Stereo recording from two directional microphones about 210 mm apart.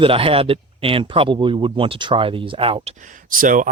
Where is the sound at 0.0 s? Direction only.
25° right (ahead or behind).